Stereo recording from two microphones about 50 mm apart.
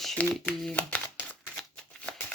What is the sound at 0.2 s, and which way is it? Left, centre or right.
Speech, left.